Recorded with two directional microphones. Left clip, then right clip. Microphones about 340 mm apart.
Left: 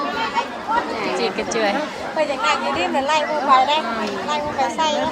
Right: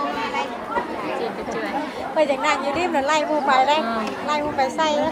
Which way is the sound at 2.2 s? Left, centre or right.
Right.